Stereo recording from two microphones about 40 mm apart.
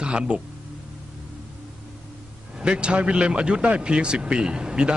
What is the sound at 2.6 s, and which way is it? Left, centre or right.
A man's voice, right.